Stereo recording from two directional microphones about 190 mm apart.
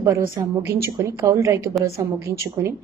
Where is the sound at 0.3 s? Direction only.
20° right (ahead or behind).